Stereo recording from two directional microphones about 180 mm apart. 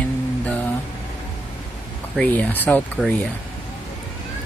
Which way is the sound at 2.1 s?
10° left (ahead or behind).